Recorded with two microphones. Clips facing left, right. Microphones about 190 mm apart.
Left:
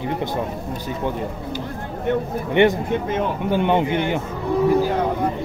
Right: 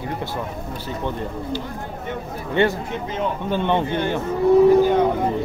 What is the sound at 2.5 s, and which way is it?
Speech, 20° left (ahead or behind).